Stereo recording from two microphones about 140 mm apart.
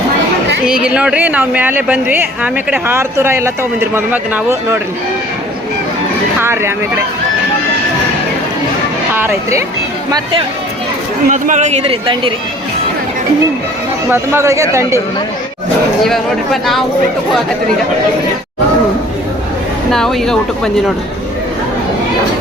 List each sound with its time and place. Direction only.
0.6 s speech: 5° right (ahead or behind)
6.4 s speech: 20° right (ahead or behind)
9.1 s speech: 15° right (ahead or behind)
11.3 s speech: 65° right (ahead or behind); by 12.3 s 40° right (ahead or behind)
14.1 s speech: 20° right (ahead or behind)
16.0 s speech: centre (ahead or behind)
19.9 s speech: centre (ahead or behind)